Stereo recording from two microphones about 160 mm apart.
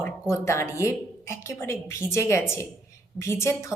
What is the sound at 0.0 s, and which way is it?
A woman's voice, 15° left (ahead or behind).